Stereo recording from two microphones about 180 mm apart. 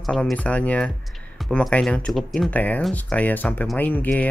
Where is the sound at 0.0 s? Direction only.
5° left (ahead or behind).